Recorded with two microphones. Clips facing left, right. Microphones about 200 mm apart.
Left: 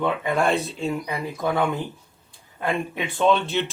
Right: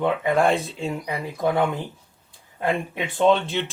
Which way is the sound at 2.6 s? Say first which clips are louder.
Right 1 dB; 15° right (ahead or behind).